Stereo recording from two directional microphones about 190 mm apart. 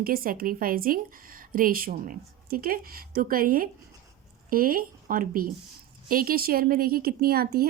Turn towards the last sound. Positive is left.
turn(degrees=-55)  # may be behind; listen again after turning